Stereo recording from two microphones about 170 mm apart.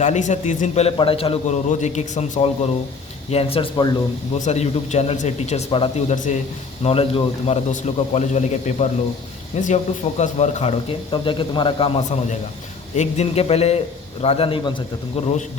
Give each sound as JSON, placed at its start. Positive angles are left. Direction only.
{"t": 0.0, "sound": "a man's voice", "side_deg": 45}
{"t": 4.4, "sound": "speech", "side_deg": 40}
{"t": 6.1, "sound": "a man's voice", "side_deg": 50}
{"t": 6.8, "sound": "speech", "side_deg": 35}
{"t": 13.0, "sound": "speech", "side_deg": 40}